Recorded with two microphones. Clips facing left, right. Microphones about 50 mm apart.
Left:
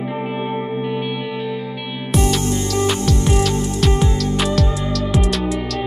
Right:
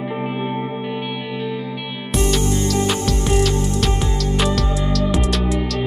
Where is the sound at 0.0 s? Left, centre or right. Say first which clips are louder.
Even; centre.